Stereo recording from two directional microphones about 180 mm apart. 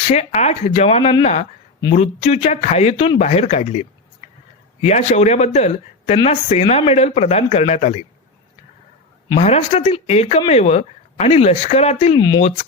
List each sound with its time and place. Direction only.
0.1 s speech: 40° left (ahead or behind)
9.3 s speech: 35° left (ahead or behind)